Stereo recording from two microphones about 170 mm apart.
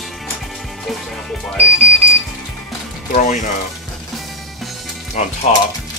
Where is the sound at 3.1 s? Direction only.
45° left (ahead or behind).